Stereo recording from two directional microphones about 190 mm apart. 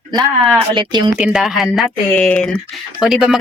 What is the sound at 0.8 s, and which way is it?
Speech, 25° right (ahead or behind).